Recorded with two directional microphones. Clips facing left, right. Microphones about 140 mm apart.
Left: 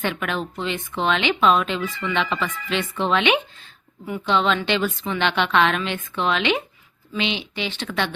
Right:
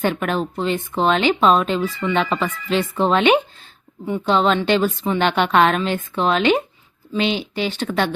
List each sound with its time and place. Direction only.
0.0 s speech: 40° right (ahead or behind)